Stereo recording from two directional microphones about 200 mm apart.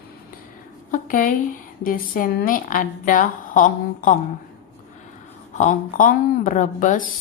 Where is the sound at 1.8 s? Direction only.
45° left (ahead or behind).